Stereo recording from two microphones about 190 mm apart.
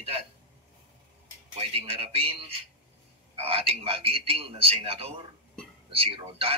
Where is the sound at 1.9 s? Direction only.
30° right (ahead or behind).